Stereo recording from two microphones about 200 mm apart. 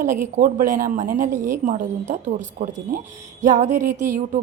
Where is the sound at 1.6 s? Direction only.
35° right (ahead or behind).